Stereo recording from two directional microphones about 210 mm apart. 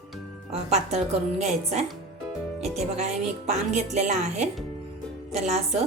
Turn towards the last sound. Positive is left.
turn(degrees=-30)  # may be behind; listen again after turning